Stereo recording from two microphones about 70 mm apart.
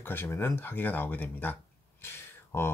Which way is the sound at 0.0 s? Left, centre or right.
Left.